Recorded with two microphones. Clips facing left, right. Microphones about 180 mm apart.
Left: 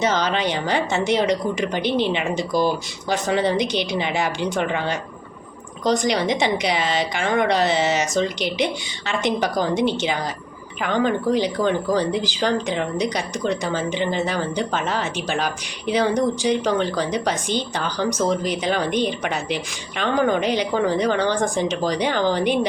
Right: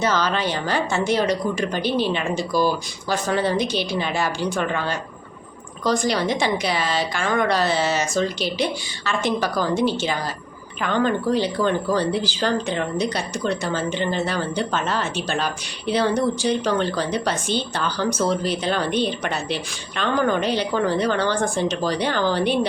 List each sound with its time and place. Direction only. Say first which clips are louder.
0.0 s speech: left 1 dB; 20° left (ahead or behind)